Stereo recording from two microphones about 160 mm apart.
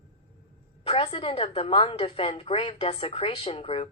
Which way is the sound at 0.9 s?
35° left (ahead or behind).